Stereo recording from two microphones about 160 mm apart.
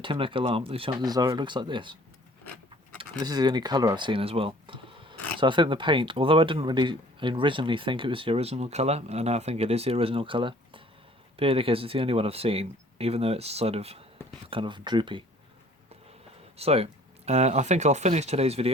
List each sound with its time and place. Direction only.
0.0 s speech: 30° right (ahead or behind)
3.2 s speech: 25° right (ahead or behind)
16.6 s speech: 40° right (ahead or behind)